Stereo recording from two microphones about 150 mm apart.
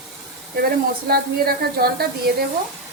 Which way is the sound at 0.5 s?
90° right.